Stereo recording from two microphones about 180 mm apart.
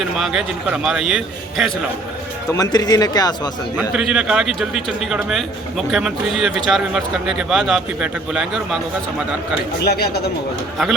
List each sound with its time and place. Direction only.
0.2 s a man's voice: centre (ahead or behind)
2.5 s speech: 20° left (ahead or behind)
3.8 s a man's voice: 5° right (ahead or behind)
9.8 s speech: 60° left (ahead or behind)